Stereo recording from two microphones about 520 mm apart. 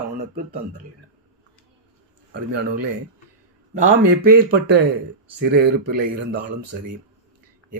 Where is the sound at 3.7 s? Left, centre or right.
Centre.